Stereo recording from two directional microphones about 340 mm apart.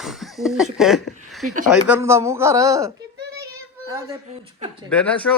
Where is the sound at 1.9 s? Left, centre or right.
Centre.